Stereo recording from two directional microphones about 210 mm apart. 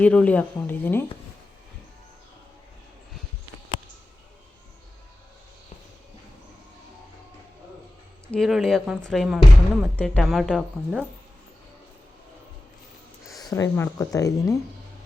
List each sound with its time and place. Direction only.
0.0 s speech: 5° left (ahead or behind)
8.3 s a woman's voice: centre (ahead or behind)
13.4 s speech: 15° left (ahead or behind)